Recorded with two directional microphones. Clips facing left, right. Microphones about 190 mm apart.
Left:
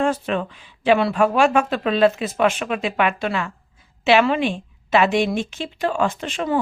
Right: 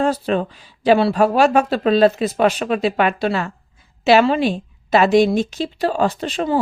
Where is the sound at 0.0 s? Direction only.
35° right (ahead or behind).